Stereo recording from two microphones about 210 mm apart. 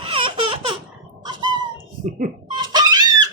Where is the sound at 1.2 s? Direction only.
20° right (ahead or behind).